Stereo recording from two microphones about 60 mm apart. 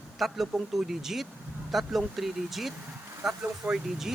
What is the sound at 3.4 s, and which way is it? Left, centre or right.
Speech, centre.